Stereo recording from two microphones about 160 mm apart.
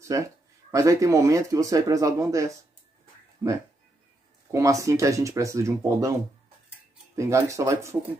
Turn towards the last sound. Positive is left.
turn(degrees=-20)  # may be behind; listen again after turning